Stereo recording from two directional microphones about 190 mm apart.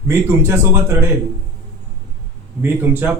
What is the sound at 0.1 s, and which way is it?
Speech, 10° right (ahead or behind).